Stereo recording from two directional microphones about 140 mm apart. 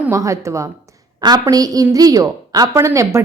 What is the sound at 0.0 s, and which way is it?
Speech, 20° right (ahead or behind).